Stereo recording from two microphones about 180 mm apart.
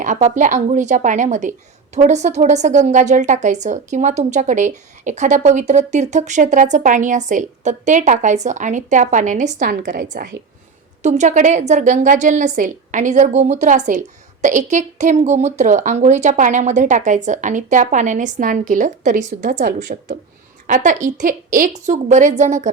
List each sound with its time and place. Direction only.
0.0 s a woman's voice: 40° right (ahead or behind); by 10.1 s 60° right (ahead or behind)
11.0 s a woman's voice: 40° right (ahead or behind)